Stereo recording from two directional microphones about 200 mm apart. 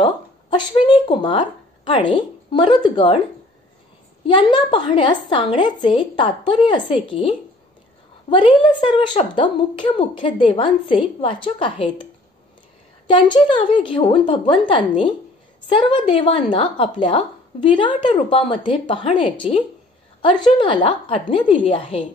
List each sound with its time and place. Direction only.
0.0 s speech: 25° left (ahead or behind)
4.3 s a woman's voice: 25° left (ahead or behind)